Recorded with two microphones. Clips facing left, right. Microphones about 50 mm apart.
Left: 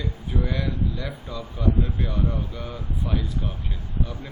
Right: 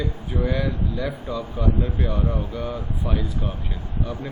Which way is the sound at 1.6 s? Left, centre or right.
Right.